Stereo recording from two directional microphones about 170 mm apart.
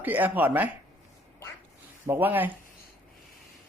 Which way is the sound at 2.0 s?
10° right (ahead or behind).